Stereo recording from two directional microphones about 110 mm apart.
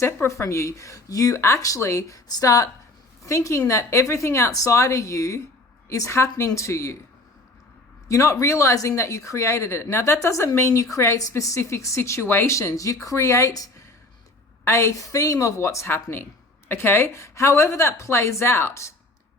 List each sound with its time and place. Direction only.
0.0 s speech: 25° left (ahead or behind)
8.0 s speech: 25° left (ahead or behind)